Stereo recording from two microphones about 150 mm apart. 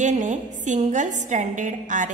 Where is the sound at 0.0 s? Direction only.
55° right (ahead or behind).